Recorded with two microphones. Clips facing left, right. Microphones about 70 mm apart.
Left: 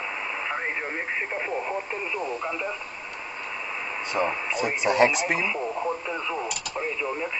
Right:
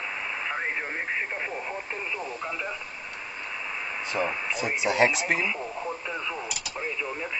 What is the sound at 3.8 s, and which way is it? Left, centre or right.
Speech, centre.